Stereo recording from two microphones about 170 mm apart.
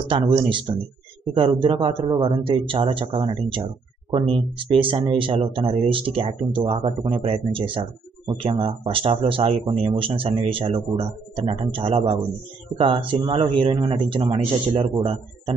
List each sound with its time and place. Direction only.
0.1 s speech: 30° right (ahead or behind)